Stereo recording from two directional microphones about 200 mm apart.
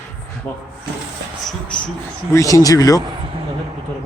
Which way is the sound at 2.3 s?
15° left (ahead or behind).